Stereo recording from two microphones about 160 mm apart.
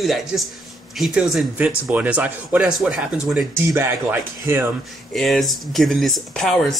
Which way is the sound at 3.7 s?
15° right (ahead or behind).